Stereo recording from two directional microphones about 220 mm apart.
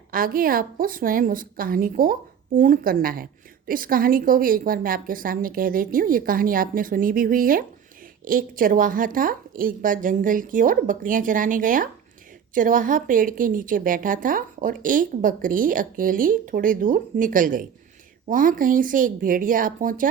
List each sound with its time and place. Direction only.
0.1 s a woman's voice: 40° right (ahead or behind)